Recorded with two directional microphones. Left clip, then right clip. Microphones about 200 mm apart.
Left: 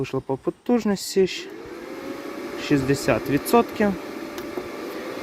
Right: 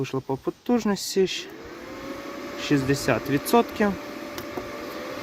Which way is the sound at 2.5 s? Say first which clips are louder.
Left 2 dB; centre (ahead or behind).